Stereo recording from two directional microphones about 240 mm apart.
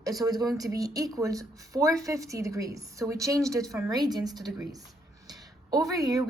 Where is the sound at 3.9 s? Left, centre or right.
Centre.